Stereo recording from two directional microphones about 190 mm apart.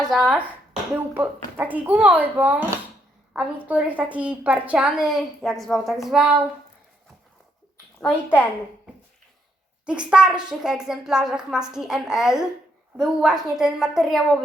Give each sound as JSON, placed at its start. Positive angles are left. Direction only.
{"t": 0.1, "sound": "a woman's voice", "side_deg": -5}
{"t": 8.0, "sound": "a woman's voice", "side_deg": 5}
{"t": 9.8, "sound": "a woman's voice", "side_deg": -5}